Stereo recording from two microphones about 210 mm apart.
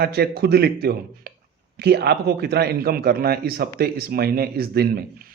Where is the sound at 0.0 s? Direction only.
50° right (ahead or behind).